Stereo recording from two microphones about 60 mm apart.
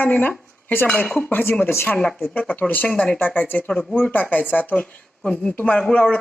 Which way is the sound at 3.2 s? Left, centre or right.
Left.